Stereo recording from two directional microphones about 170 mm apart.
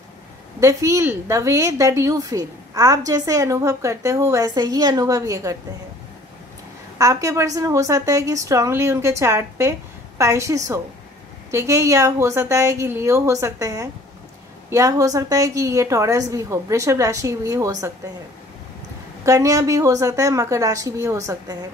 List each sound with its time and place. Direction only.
0.6 s a woman's voice: 20° right (ahead or behind)
7.0 s a woman's voice: 20° right (ahead or behind)
19.2 s a woman's voice: 20° right (ahead or behind)